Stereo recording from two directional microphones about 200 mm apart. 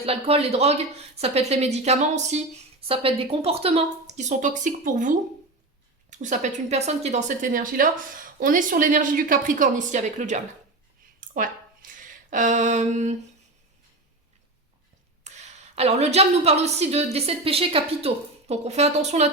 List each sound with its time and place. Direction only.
0.0 s a woman's voice: 30° right (ahead or behind)
11.2 s a sound: 40° right (ahead or behind)
12.3 s a woman's voice: 40° right (ahead or behind)
15.2 s a woman's voice: 35° right (ahead or behind)